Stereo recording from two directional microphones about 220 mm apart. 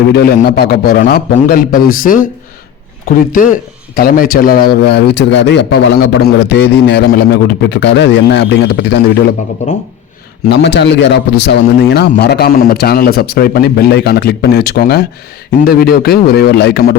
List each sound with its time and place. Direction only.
0.1 s a man's voice: 45° left (ahead or behind)
10.5 s a man's voice: 50° left (ahead or behind)